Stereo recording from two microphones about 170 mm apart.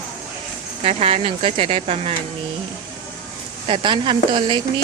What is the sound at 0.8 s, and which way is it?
Speech, 35° right (ahead or behind).